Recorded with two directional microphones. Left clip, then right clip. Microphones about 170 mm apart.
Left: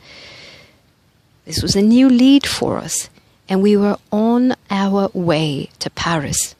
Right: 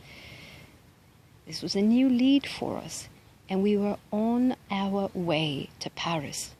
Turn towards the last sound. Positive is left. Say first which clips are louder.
# left 12 dB
turn(degrees=55)  # may be behind; listen again after turning